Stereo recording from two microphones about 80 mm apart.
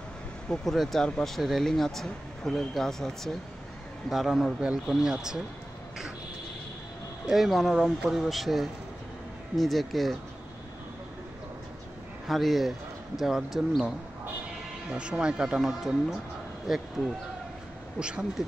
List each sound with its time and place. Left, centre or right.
0.5 s speech: centre
4.1 s speech: centre
7.2 s speech: centre
12.3 s speech: centre
17.9 s speech: centre